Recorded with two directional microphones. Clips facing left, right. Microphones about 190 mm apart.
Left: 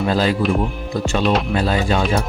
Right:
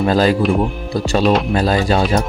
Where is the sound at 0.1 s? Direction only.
45° right (ahead or behind).